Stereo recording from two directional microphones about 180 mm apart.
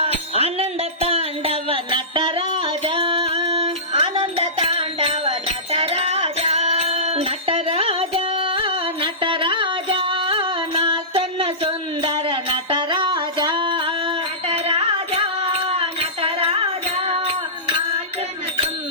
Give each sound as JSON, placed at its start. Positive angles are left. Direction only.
{"t": 0.0, "sound": "music", "side_deg": -35}